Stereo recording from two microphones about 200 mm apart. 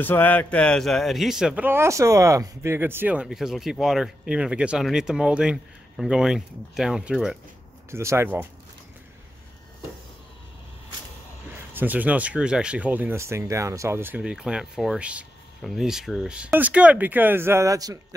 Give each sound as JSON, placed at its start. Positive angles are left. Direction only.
{"t": 0.0, "sound": "a man's voice", "side_deg": 10}
{"t": 11.5, "sound": "speech", "side_deg": -10}